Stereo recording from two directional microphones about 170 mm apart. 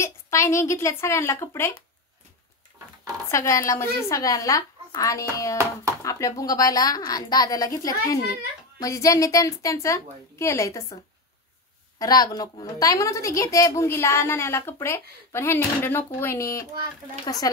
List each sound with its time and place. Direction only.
0.0 s a woman's voice: 15° left (ahead or behind)
3.3 s a woman's voice: 20° left (ahead or behind)
12.0 s a woman's voice: 20° left (ahead or behind)